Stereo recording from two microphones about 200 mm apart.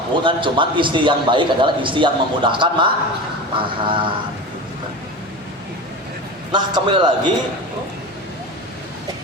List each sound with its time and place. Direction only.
0.2 s a man's voice: 25° right (ahead or behind)
6.5 s a man's voice: 25° right (ahead or behind)